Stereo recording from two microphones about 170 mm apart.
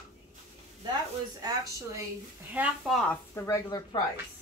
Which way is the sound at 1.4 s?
20° right (ahead or behind).